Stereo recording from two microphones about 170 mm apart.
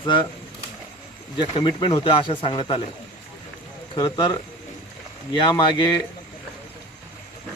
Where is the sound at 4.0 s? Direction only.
25° left (ahead or behind).